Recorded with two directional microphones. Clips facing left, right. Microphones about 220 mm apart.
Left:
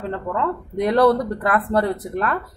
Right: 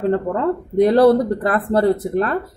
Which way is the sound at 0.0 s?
40° right (ahead or behind).